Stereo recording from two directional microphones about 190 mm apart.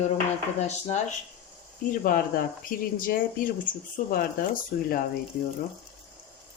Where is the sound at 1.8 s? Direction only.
50° left (ahead or behind).